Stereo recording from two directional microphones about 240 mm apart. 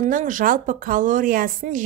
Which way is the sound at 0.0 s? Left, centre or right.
Right.